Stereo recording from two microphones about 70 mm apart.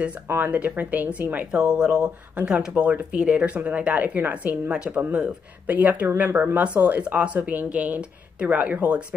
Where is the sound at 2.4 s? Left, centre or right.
Right.